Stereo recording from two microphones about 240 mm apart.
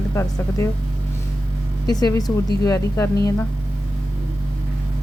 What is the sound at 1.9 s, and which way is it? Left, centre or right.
Speech, centre.